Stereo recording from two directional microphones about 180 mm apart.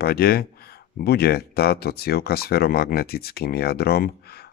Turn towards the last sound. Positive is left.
turn(degrees=60)  # may be behind; listen again after turning